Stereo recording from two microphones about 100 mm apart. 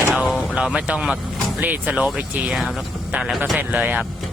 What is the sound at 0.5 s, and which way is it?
Speech, 10° right (ahead or behind).